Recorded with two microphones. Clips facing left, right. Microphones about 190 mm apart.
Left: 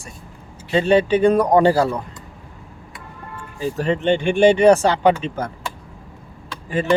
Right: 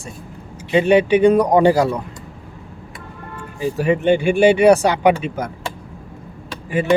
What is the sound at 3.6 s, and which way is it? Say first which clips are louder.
Speech: right 3 dB; 10° right (ahead or behind).